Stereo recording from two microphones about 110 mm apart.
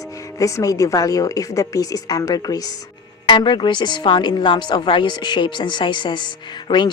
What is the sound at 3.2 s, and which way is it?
A woman's voice, 45° left (ahead or behind).